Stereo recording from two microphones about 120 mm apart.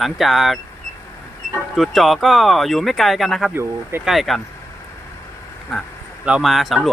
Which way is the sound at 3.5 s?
20° right (ahead or behind).